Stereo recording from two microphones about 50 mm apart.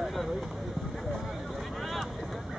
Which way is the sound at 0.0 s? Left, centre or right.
Centre.